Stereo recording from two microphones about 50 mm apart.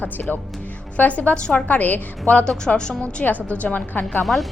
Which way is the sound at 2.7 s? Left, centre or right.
Centre.